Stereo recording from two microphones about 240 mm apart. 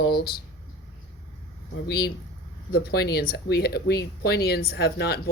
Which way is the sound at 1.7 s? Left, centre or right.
Left.